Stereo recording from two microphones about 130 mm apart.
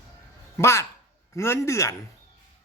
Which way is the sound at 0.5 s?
20° left (ahead or behind).